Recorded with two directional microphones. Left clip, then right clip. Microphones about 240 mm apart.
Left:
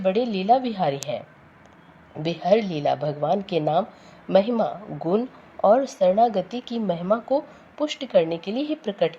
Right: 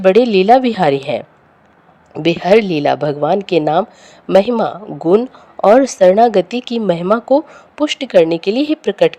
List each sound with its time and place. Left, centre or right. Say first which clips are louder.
0.0 s speech: right 13 dB; right
2.1 s speech: right 10 dB; right